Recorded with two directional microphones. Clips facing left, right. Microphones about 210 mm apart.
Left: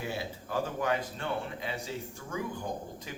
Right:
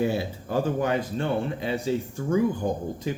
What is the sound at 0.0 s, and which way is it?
Speech, 30° right (ahead or behind).